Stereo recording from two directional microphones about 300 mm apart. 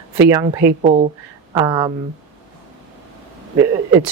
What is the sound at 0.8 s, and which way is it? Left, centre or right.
Speech, right.